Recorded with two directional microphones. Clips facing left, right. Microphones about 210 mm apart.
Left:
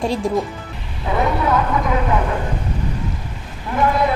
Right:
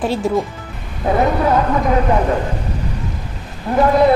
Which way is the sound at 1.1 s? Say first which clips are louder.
Right 5 dB; 40° right (ahead or behind).